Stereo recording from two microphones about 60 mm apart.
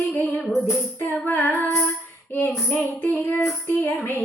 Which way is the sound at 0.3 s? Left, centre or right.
Centre.